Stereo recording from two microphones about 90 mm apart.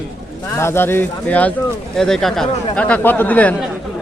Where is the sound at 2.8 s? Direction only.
20° left (ahead or behind).